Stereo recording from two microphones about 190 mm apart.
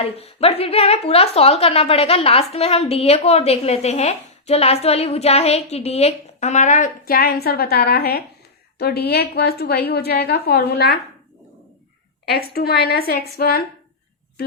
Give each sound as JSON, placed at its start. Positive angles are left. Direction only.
{"t": 0.2, "sound": "a woman's voice", "side_deg": 30}
{"t": 12.3, "sound": "a woman's voice", "side_deg": 55}